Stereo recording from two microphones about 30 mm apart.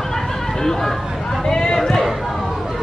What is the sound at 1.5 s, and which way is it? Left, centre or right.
Speech, left.